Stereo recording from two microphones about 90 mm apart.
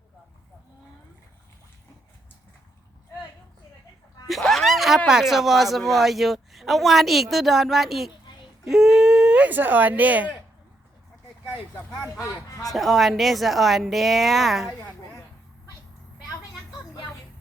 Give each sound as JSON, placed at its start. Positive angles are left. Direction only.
{"t": 4.3, "sound": "speech", "side_deg": 0}
{"t": 12.7, "sound": "speech", "side_deg": 0}